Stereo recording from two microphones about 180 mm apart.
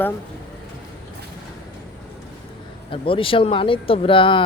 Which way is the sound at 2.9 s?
30° left (ahead or behind).